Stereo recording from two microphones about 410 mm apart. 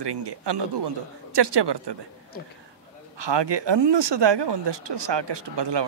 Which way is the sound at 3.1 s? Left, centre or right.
Right.